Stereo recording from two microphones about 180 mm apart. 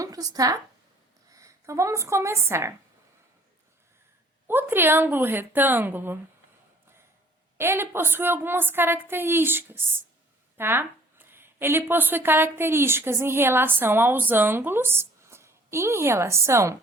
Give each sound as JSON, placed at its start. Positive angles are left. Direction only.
{"t": 0.0, "sound": "speech", "side_deg": -20}
{"t": 4.4, "sound": "a woman's voice", "side_deg": -10}
{"t": 7.6, "sound": "a woman's voice", "side_deg": -15}